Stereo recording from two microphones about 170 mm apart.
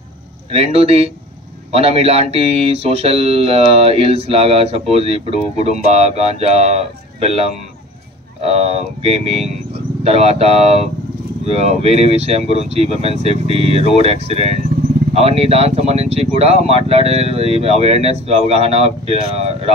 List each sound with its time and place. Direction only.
0.5 s mantra: 35° right (ahead or behind)
9.7 s speech: 35° right (ahead or behind)
11.4 s mantra: 40° right (ahead or behind)